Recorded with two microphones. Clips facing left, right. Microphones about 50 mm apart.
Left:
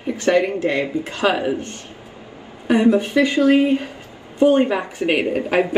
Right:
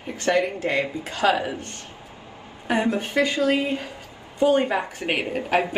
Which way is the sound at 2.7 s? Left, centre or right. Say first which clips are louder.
Left 7 dB; left.